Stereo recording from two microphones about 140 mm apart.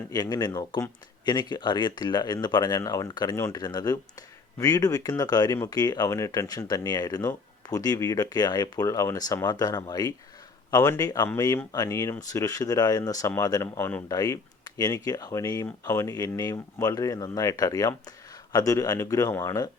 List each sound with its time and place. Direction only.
0.1 s speech: 30° left (ahead or behind)